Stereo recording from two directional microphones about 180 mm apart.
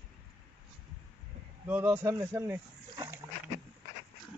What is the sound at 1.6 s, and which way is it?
Speech, 10° right (ahead or behind).